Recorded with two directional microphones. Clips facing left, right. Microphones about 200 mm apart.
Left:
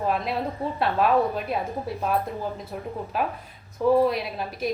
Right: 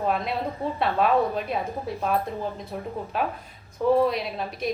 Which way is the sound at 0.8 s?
Centre (ahead or behind).